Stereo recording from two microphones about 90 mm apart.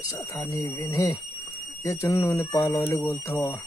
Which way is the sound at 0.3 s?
40° left (ahead or behind).